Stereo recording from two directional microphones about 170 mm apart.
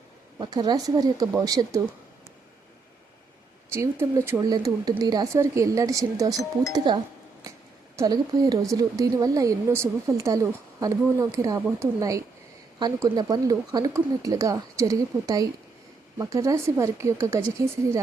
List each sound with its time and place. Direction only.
0.3 s a woman's voice: 25° right (ahead or behind)
3.7 s a woman's voice: 15° right (ahead or behind)